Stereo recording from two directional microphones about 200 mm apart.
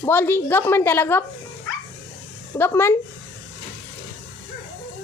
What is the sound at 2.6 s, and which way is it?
Speech, 10° left (ahead or behind).